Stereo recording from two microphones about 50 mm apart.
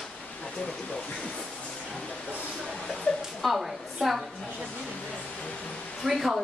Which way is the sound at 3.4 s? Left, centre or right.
Centre.